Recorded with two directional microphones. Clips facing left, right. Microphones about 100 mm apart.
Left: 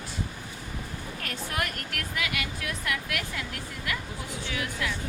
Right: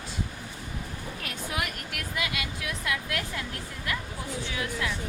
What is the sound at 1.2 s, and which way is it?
Speech, 10° right (ahead or behind).